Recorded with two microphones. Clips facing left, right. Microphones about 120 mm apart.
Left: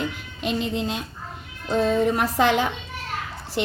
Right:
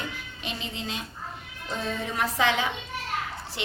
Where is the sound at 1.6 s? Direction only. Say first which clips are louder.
Left 11 dB; 45° left (ahead or behind).